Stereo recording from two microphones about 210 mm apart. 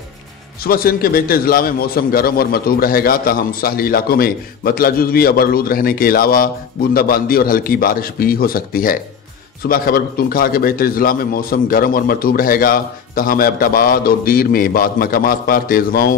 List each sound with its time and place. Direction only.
0.7 s a man's voice: 45° left (ahead or behind)